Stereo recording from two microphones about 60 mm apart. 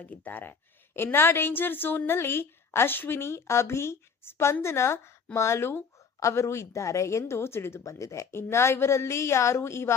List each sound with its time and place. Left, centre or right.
0.0 s a woman's voice: left
0.9 s a woman's voice: left
6.1 s a woman's voice: left
7.9 s a woman's voice: left